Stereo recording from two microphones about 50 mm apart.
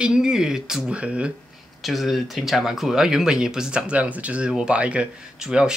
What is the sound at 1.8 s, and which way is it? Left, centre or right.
Speech, centre.